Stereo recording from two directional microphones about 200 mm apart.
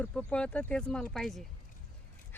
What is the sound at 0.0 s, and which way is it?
Speech, 5° left (ahead or behind).